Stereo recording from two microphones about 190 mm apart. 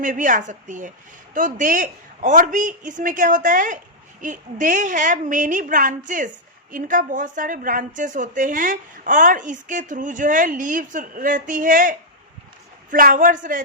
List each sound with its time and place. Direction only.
0.0 s a woman's voice: 45° right (ahead or behind)